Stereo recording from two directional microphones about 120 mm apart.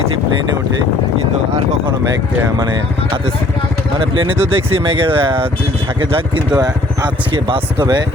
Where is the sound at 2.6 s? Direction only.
35° right (ahead or behind).